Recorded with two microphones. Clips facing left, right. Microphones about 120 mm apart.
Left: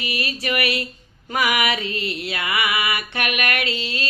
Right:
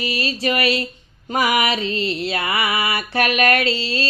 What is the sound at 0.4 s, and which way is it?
Speech, 30° right (ahead or behind).